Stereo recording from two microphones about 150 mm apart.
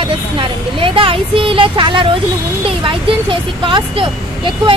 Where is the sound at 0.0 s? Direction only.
35° right (ahead or behind).